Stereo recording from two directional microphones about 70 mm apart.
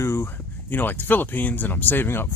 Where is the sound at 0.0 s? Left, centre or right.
Left.